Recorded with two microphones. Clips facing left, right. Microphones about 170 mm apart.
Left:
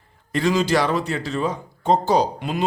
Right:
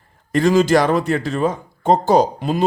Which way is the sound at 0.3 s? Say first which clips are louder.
Right 6 dB; 50° right (ahead or behind).